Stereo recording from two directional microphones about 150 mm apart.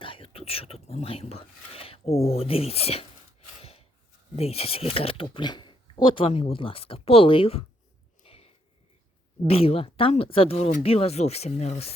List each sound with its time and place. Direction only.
0.0 s speech: 35° left (ahead or behind)
3.6 s gasp: 40° left (ahead or behind)
4.4 s speech: 40° left (ahead or behind)
8.2 s sniff: 40° left (ahead or behind)
9.5 s speech: 40° left (ahead or behind)